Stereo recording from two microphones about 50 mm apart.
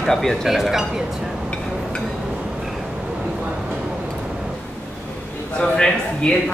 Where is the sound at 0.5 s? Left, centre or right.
Centre.